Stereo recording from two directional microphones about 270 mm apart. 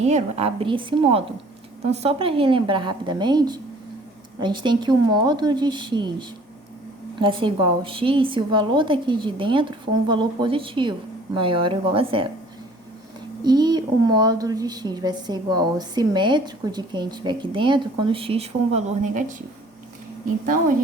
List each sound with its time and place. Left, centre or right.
0.0 s a woman's voice: right
13.4 s a woman's voice: centre